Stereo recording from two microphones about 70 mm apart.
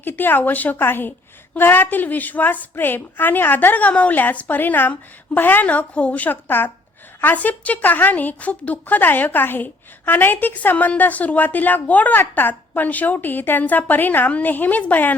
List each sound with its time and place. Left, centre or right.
0.0 s a woman's voice: left